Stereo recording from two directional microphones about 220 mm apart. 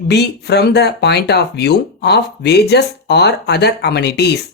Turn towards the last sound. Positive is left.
turn(degrees=50)  # may be behind; listen again after turning